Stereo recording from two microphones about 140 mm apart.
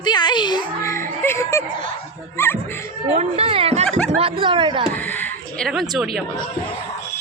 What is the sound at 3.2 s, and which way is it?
Speech, 45° right (ahead or behind).